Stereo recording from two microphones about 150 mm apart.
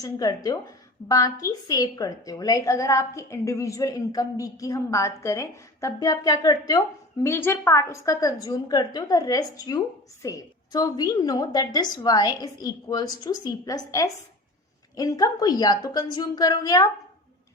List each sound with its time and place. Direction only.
0.0 s a woman's voice: 25° left (ahead or behind)